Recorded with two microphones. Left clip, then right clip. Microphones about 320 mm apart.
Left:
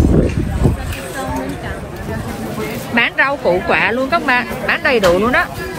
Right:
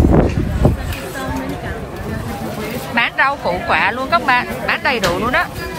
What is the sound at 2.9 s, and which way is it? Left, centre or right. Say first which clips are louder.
A woman's voice: left 1 dB; centre.